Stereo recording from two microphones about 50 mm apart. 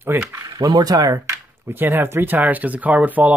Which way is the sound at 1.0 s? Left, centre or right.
Right.